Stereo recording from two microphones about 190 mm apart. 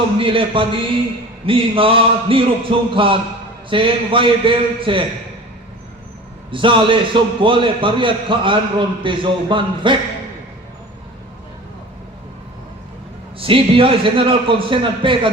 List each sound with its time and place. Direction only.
0.2 s a man's voice: 25° right (ahead or behind)
6.5 s a man's voice: 25° right (ahead or behind)
13.4 s a man's voice: 30° right (ahead or behind)